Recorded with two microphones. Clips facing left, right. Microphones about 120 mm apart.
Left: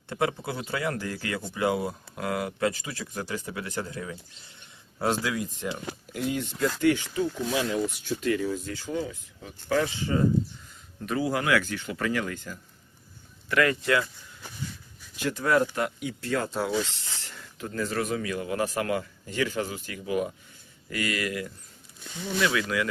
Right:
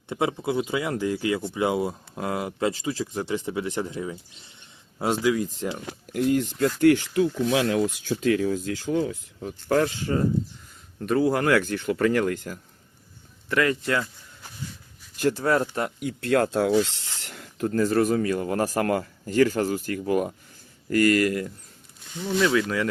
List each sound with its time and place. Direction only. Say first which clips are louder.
0.1 s speech: right 3 dB; 20° right (ahead or behind)
5.4 s speech: right 4 dB; 35° right (ahead or behind)
6.1 s speech: right 7 dB; 50° right (ahead or behind); by 9.0 s 90° right
9.4 s speech: right 4 dB; 50° right (ahead or behind)
11.0 s speech: right 6 dB; 50° right (ahead or behind)
13.5 s speech: even; 25° right (ahead or behind)
15.3 s speech: right 1 dB; 35° right (ahead or behind)
16.2 s speech: right 7 dB; 65° right (ahead or behind)
17.2 s speech: right 13 dB; 60° right (ahead or behind); by 21.5 s 45° right (ahead or behind)
22.4 s speech: right 3 dB; 30° right (ahead or behind)